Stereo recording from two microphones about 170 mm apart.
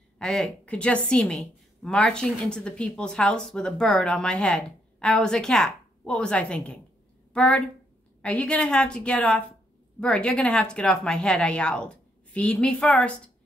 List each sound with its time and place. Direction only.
0.2 s a woman's voice: 5° left (ahead or behind)